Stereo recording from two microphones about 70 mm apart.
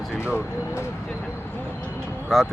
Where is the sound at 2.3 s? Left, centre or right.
Centre.